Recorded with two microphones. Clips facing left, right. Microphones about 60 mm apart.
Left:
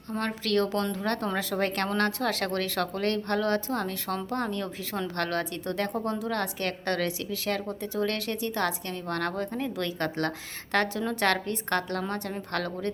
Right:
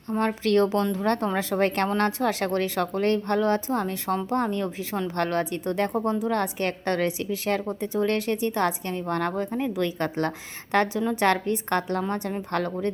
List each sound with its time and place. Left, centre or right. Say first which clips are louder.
0.1 s a woman's voice: right 6 dB; centre
0.4 s a woman's voice: right 4 dB; right